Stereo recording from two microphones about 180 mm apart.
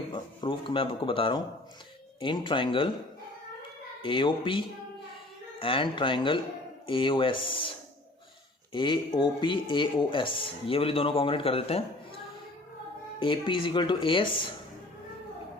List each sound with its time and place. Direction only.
0.1 s speech: 30° left (ahead or behind)
4.0 s speech: 30° left (ahead or behind)
8.7 s speech: 25° left (ahead or behind)
13.1 s speech: 30° left (ahead or behind)